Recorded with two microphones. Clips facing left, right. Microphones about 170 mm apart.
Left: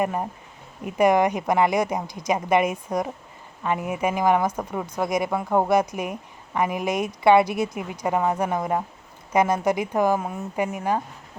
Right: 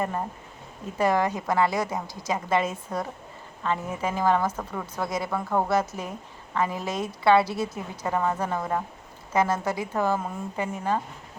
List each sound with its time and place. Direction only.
0.0 s a woman's voice: 15° left (ahead or behind)